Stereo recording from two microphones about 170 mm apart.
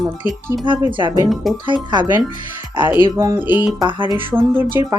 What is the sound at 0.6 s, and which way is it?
Speech, 30° right (ahead or behind).